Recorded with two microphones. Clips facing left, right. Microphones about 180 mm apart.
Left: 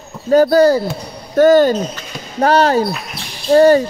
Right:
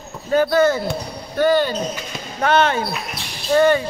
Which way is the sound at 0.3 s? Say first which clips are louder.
Left 6 dB; 35° left (ahead or behind).